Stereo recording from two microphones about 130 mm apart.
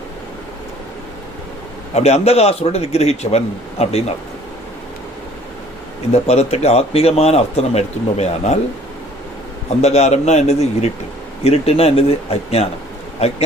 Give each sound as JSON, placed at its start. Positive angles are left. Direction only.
{"t": 1.9, "sound": "speech", "side_deg": 55}
{"t": 6.2, "sound": "speech", "side_deg": 55}
{"t": 9.6, "sound": "a man's voice", "side_deg": 55}